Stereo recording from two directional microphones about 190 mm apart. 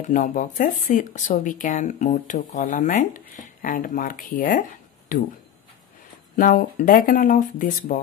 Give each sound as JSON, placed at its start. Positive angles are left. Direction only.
{"t": 0.0, "sound": "speech", "side_deg": 40}
{"t": 6.3, "sound": "speech", "side_deg": 45}